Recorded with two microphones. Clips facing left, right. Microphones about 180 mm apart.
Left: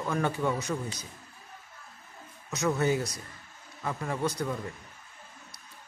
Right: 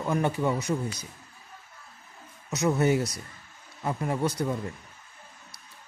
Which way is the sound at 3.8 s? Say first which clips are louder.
Right 3 dB; 25° right (ahead or behind).